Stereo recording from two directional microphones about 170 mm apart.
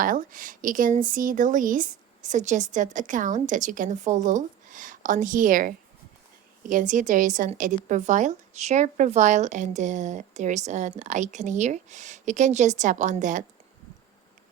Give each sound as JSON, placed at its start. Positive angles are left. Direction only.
{"t": 0.0, "sound": "speech", "side_deg": -55}